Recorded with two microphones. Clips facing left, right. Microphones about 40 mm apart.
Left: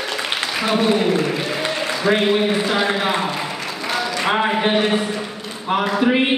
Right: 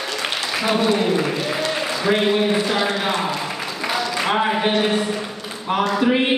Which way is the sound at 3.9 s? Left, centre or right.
Centre.